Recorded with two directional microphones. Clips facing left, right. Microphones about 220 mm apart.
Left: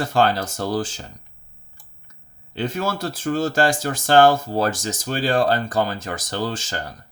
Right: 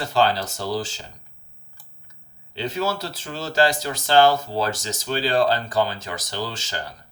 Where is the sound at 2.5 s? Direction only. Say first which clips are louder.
Left 1 dB; 50° left (ahead or behind).